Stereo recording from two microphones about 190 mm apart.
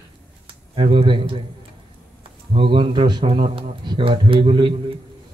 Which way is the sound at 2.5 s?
25° right (ahead or behind).